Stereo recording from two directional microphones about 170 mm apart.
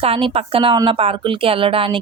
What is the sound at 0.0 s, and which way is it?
A woman's voice, 30° right (ahead or behind).